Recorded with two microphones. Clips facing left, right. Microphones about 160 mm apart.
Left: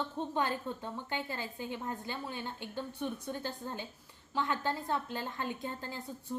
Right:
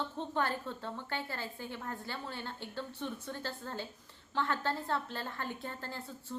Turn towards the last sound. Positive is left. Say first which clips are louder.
# left 2 dB
turn(degrees=15)  # may be behind; listen again after turning